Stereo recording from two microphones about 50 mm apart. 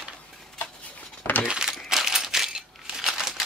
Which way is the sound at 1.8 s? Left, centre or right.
Centre.